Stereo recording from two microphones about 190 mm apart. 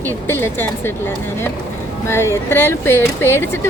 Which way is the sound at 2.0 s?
15° left (ahead or behind).